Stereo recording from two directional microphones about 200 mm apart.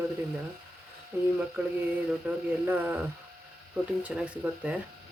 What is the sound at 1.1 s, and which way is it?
Speech, 10° right (ahead or behind).